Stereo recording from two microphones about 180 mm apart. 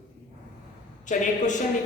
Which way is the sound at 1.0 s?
45° left (ahead or behind).